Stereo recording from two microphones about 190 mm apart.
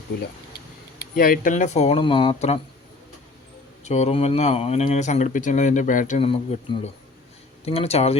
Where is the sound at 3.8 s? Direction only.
35° left (ahead or behind).